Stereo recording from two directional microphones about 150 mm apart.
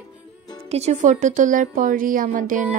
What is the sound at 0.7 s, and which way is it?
A woman's voice, 45° right (ahead or behind).